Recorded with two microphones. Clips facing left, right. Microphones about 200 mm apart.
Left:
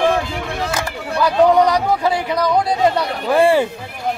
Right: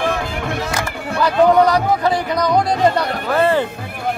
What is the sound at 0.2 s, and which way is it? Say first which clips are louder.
Music: right 1 dB; 55° right (ahead or behind).